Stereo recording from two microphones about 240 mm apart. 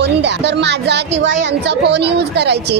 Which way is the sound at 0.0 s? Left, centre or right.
Right.